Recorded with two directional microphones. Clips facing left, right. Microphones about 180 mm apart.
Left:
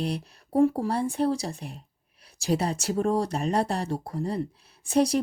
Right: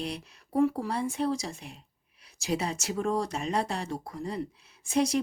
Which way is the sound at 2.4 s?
35° left (ahead or behind).